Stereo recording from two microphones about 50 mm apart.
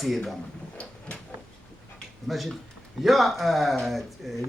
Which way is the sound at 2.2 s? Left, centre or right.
Centre.